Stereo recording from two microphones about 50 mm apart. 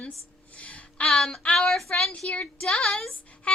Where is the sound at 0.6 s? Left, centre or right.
Left.